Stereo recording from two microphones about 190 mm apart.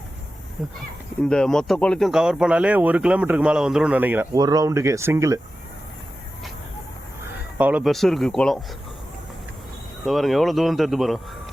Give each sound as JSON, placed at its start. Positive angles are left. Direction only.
{"t": 0.6, "sound": "speech", "side_deg": 0}
{"t": 7.6, "sound": "speech", "side_deg": -5}
{"t": 10.1, "sound": "speech", "side_deg": 0}